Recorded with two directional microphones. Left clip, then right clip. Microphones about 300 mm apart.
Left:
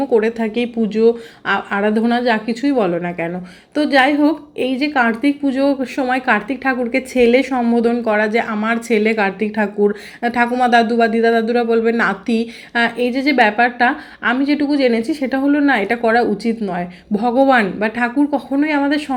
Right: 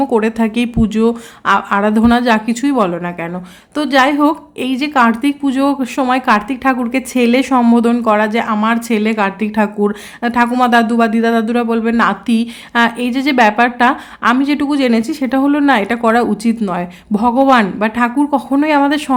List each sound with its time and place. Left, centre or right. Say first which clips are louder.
0.0 s a woman's voice: right 2 dB; centre